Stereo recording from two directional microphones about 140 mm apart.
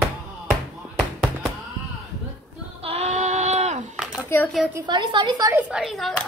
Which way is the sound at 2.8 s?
50° right (ahead or behind).